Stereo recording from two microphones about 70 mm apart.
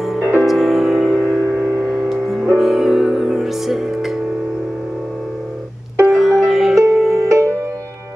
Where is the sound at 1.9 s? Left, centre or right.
Centre.